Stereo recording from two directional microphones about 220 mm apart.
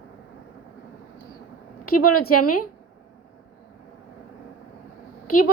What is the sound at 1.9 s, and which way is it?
Speech, 90° left.